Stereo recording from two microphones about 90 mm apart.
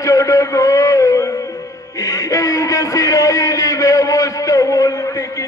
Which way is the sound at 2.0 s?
40° left (ahead or behind).